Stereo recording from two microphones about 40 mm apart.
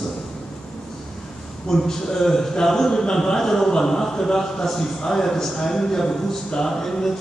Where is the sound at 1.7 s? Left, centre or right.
Centre.